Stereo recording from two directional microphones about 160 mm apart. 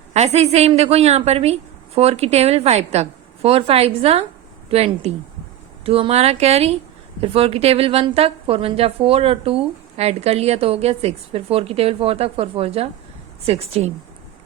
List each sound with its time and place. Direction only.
0.1 s a woman's voice: 45° right (ahead or behind)